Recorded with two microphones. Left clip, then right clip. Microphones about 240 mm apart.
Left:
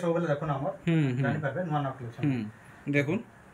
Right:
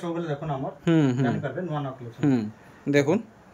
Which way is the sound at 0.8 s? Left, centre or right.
Centre.